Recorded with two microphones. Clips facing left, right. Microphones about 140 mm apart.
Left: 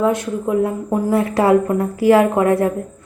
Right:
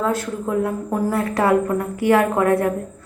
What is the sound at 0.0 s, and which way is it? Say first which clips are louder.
A woman's voice: left 4 dB; 20° left (ahead or behind).